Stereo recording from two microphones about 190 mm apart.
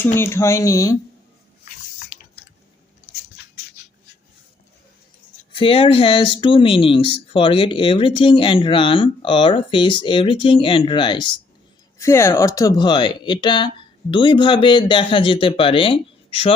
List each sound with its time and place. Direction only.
0.2 s speech: 15° left (ahead or behind)
2.1 s squish: 50° left (ahead or behind)
5.5 s speech: 30° left (ahead or behind)
11.9 s speech: 15° left (ahead or behind)